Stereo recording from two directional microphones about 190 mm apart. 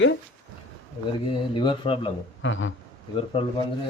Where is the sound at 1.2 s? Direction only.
25° left (ahead or behind).